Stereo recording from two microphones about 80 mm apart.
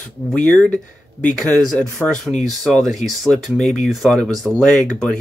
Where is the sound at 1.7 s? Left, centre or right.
Centre.